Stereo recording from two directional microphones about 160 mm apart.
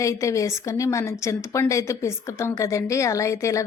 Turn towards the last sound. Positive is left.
turn(degrees=20)  # may be behind; listen again after turning